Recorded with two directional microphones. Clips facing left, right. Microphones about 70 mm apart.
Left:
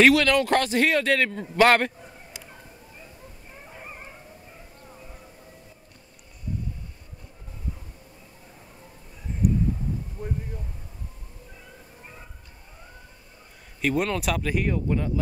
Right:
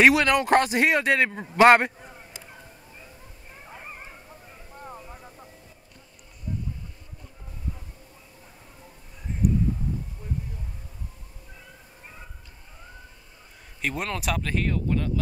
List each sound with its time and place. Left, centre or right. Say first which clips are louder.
0.0 s a man's voice: left 1 dB; centre
10.2 s a sound: left 7 dB; left
13.7 s speech: left 5 dB; centre